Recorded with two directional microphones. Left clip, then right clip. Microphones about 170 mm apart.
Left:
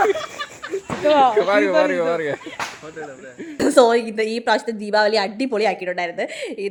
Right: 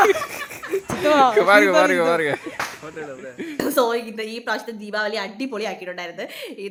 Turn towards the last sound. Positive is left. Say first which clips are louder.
# left 6 dB
turn(degrees=25)  # may be behind; listen again after turning